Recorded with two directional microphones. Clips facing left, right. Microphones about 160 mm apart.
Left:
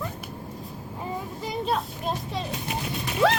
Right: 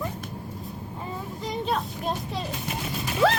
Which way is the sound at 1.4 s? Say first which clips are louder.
Even; centre (ahead or behind).